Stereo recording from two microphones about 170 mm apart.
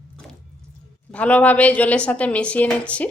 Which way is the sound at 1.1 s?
10° left (ahead or behind).